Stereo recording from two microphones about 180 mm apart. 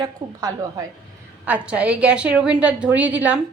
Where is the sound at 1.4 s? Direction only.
5° right (ahead or behind).